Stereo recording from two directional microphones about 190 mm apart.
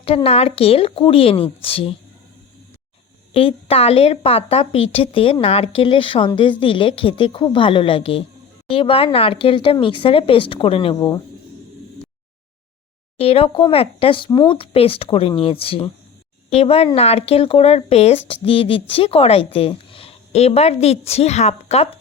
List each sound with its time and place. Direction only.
0.0 s speech: 30° left (ahead or behind)
3.3 s speech: 30° left (ahead or behind)
13.1 s speech: 30° left (ahead or behind)